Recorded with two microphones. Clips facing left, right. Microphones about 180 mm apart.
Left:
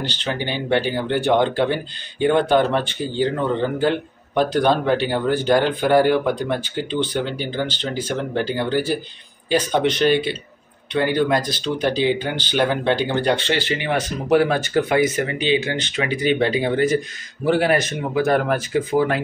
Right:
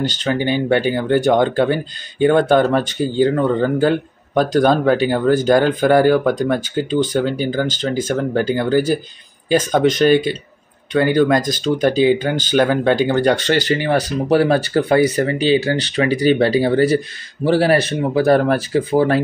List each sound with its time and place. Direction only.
0.0 s speech: 45° right (ahead or behind)